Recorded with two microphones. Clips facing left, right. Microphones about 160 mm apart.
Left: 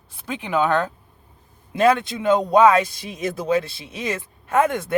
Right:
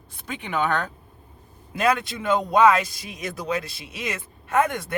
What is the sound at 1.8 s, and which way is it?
Speech, 25° left (ahead or behind).